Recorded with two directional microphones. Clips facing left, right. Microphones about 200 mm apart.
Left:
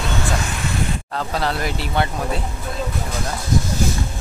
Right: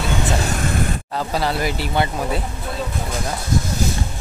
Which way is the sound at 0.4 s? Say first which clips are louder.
Right 4 dB; 45° right (ahead or behind).